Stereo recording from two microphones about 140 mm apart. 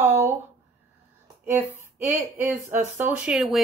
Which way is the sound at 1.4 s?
15° right (ahead or behind).